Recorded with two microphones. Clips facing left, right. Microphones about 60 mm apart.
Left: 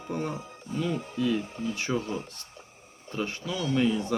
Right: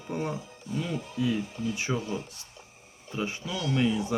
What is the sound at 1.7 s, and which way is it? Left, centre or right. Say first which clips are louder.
Speech: left 1 dB; centre.